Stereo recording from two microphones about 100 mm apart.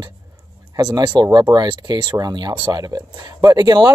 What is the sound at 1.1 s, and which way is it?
Speech, 45° right (ahead or behind).